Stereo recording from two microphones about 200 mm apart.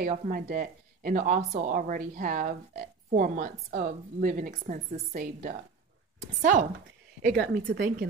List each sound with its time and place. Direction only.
0.0 s speech: 45° right (ahead or behind)
7.2 s speech: centre (ahead or behind)
7.5 s speech: 50° right (ahead or behind)